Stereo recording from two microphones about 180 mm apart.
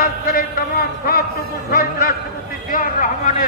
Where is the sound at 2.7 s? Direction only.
50° left (ahead or behind).